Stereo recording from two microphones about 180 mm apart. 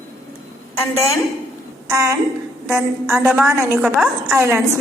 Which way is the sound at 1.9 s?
15° right (ahead or behind).